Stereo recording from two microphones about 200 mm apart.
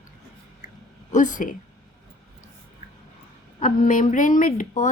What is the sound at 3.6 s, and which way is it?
Speech, 40° left (ahead or behind).